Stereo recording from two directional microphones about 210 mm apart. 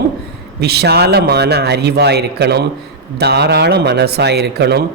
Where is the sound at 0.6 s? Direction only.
50° right (ahead or behind).